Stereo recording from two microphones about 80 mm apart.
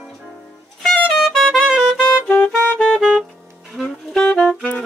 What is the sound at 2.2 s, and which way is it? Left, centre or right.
Music, left.